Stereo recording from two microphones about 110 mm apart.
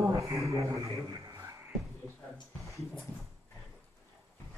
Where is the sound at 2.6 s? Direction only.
Centre (ahead or behind).